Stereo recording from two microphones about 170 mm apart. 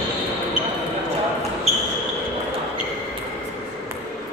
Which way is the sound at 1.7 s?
40° right (ahead or behind).